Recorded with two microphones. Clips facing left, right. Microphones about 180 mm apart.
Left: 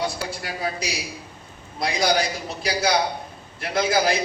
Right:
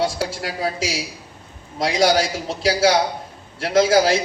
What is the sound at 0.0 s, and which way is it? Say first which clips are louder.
A man's voice: right 5 dB; 90° right.